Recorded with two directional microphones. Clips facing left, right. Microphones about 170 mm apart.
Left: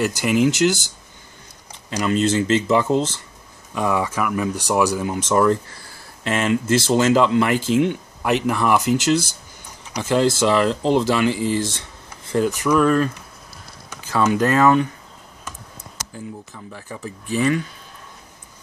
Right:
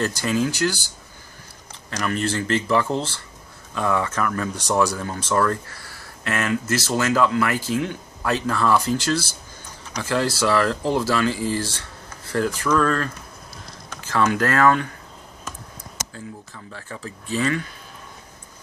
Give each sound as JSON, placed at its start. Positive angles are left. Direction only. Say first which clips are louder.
{"t": 0.0, "sound": "speech", "louder": "left 4 dB", "side_deg": 15}
{"t": 16.1, "sound": "speech", "louder": "left 3 dB", "side_deg": 15}